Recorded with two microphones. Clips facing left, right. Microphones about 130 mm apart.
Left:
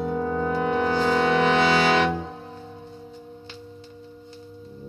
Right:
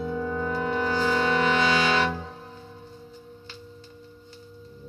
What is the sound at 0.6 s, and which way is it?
Music, 60° left (ahead or behind).